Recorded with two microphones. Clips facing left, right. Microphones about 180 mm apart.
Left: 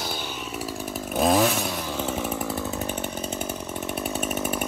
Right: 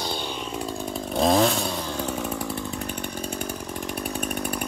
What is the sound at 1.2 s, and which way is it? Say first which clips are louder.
Chainsaw: right 1 dB; 5° left (ahead or behind).